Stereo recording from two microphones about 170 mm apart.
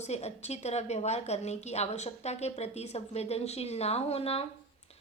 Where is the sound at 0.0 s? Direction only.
40° left (ahead or behind).